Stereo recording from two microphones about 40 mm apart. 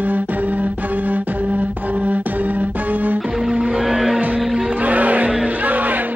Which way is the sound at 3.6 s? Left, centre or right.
Right.